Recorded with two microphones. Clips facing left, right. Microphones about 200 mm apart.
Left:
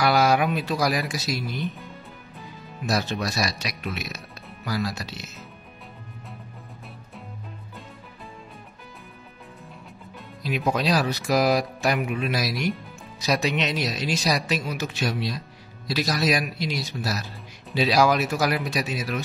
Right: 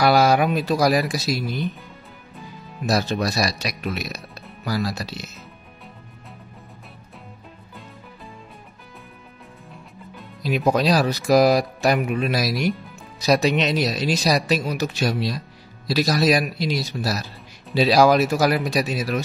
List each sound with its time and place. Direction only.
0.0 s speech: 35° right (ahead or behind)
2.9 s speech: 35° right (ahead or behind)
10.4 s speech: 40° right (ahead or behind)